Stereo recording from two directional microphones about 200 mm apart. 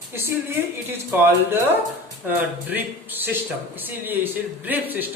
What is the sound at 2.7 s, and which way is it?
Speech, 10° right (ahead or behind).